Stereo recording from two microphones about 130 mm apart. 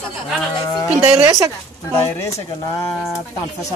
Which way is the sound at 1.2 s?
25° right (ahead or behind).